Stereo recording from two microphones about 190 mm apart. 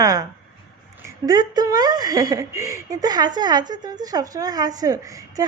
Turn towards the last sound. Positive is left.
turn(degrees=-20)  # may be behind; listen again after turning